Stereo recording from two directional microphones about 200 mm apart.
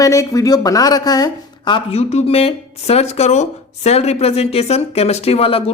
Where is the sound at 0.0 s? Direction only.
15° left (ahead or behind).